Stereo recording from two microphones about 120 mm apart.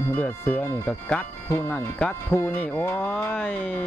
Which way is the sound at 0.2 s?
10° left (ahead or behind).